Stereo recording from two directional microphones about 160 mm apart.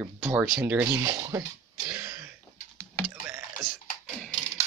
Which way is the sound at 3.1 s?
15° right (ahead or behind).